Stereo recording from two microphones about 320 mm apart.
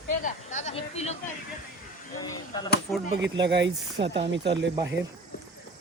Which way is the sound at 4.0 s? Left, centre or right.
Centre.